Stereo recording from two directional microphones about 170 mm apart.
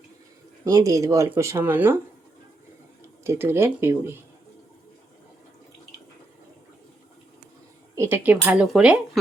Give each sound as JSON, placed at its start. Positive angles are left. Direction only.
{"t": 0.6, "sound": "speech", "side_deg": -20}
{"t": 3.2, "sound": "speech", "side_deg": -15}
{"t": 7.9, "sound": "speech", "side_deg": -15}